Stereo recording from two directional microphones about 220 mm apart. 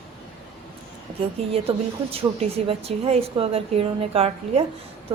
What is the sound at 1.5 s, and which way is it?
A woman's voice, 25° right (ahead or behind).